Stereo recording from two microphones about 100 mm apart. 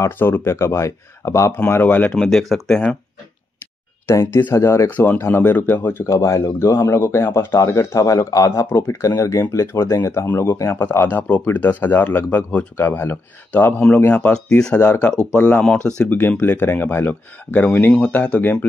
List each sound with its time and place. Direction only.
0.0 s speech: 25° left (ahead or behind)
1.7 s speech: 20° left (ahead or behind)
2.1 s speech: 5° left (ahead or behind)
4.1 s speech: 25° left (ahead or behind)